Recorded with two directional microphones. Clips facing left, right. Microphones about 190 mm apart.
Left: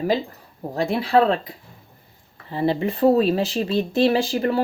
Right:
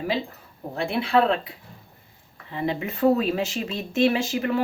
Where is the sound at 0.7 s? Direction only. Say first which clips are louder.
Left 3 dB; 35° left (ahead or behind).